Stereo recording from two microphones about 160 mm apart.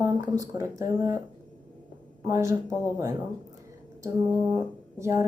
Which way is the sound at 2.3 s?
20° right (ahead or behind).